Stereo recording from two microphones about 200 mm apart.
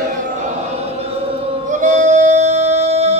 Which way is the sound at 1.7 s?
40° right (ahead or behind).